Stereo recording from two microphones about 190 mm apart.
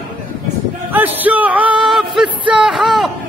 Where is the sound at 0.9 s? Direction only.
10° right (ahead or behind).